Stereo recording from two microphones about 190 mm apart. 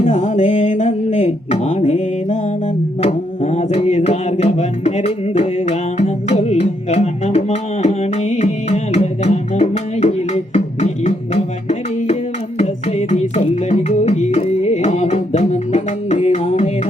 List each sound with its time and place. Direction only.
0.0 s speech: 35° left (ahead or behind)
3.0 s music: 35° left (ahead or behind)
12.5 s music: 35° left (ahead or behind)